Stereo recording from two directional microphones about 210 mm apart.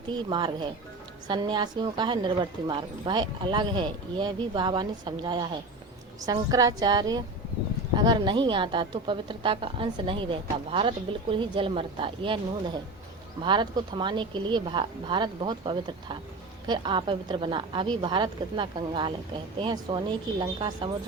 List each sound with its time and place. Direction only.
0.3 s a woman's voice: 20° right (ahead or behind)
13.4 s a woman's voice: 20° right (ahead or behind)